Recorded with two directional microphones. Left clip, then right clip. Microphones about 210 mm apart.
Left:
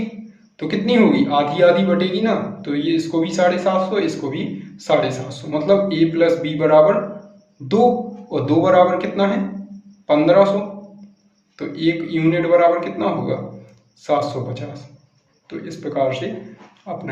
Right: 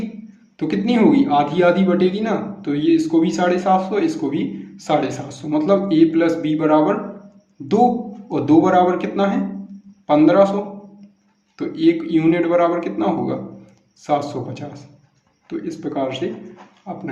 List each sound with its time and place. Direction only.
0.7 s a man's voice: 35° right (ahead or behind)
8.3 s a man's voice: 35° right (ahead or behind)
11.5 s a man's voice: 35° right (ahead or behind)